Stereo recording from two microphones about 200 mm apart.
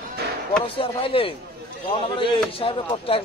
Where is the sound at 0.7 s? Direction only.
25° left (ahead or behind).